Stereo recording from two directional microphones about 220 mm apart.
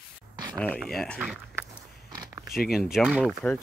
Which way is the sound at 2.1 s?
20° right (ahead or behind).